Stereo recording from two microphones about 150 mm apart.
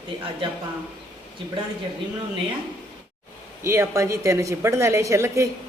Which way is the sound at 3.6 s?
20° right (ahead or behind).